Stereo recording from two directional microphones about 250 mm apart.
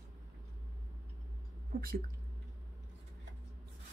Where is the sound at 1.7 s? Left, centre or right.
Right.